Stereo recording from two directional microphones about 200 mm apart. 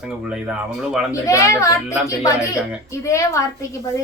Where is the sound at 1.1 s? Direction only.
15° left (ahead or behind).